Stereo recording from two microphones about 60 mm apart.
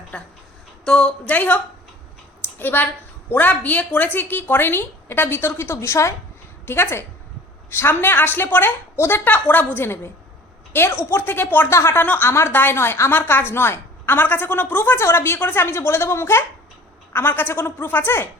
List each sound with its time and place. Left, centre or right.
0.1 s a woman's voice: centre
1.3 s a woman's voice: left
6.7 s a woman's voice: left
11.3 s a woman's voice: left
11.7 s a woman's voice: left
11.9 s a woman's voice: left
12.3 s a woman's voice: left